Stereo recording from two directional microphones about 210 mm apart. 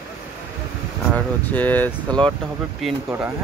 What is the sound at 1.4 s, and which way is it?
Speech, 10° left (ahead or behind).